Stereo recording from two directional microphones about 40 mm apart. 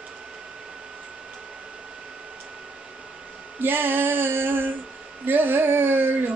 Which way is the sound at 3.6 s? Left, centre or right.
Right.